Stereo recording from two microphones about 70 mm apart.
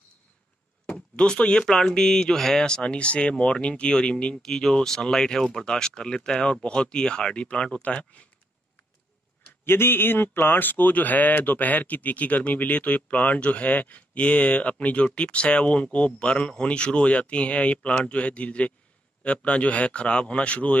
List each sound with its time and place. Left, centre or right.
0.8 s speech: centre
9.5 s speech: left; by 20.7 s centre